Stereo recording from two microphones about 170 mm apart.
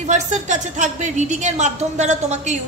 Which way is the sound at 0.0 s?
45° right (ahead or behind).